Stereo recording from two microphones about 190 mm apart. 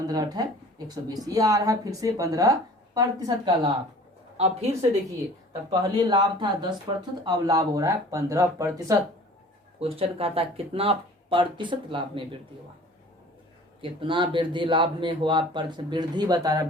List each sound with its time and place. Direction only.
0.1 s speech: 20° right (ahead or behind)
4.4 s a woman's voice: 35° right (ahead or behind)
5.7 s speech: 25° right (ahead or behind)
9.8 s speech: 30° right (ahead or behind)
13.8 s speech: 25° right (ahead or behind)